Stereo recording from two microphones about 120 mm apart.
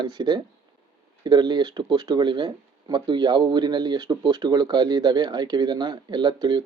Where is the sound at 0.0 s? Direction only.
35° right (ahead or behind).